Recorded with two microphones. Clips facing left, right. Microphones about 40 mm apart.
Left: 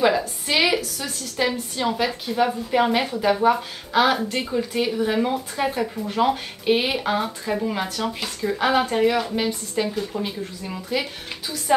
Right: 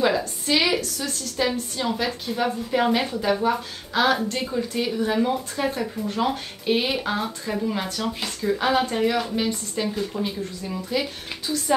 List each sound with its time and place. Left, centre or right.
0.0 s a woman's voice: centre